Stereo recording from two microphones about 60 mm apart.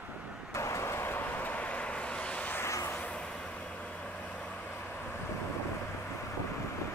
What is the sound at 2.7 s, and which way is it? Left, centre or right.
Vehicle, left.